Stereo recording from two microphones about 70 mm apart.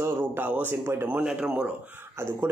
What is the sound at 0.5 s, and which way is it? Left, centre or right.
Speech, right.